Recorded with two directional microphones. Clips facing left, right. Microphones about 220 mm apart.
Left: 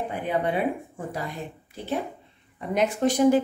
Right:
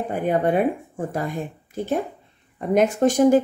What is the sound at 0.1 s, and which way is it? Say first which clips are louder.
A woman's voice: right 7 dB; 45° right (ahead or behind).